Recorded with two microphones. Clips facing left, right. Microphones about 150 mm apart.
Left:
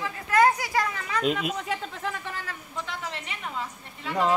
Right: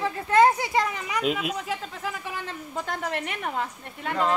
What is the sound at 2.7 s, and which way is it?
A woman's voice, 50° right (ahead or behind).